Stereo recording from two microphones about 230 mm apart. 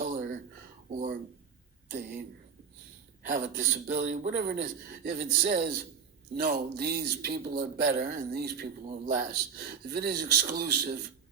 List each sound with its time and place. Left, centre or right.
0.0 s a sound: right
1.9 s speech: right
3.2 s a man's voice: right